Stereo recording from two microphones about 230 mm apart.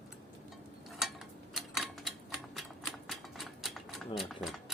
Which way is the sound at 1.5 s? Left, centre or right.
Centre.